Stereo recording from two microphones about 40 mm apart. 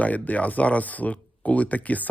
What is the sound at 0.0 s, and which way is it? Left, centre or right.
Speech, left.